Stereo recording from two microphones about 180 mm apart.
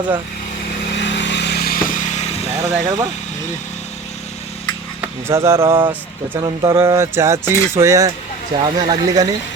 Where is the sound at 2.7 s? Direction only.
20° right (ahead or behind).